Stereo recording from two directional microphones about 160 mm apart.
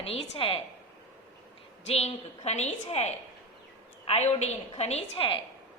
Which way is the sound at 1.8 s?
40° left (ahead or behind).